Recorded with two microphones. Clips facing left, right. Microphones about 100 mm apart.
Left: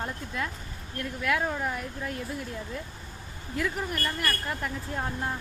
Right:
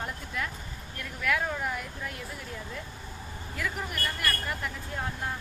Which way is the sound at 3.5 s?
30° left (ahead or behind).